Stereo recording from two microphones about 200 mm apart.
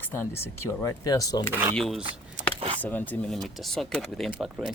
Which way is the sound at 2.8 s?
10° left (ahead or behind).